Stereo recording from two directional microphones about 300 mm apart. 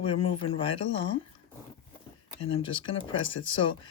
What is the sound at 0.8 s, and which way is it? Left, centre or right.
Speech, left.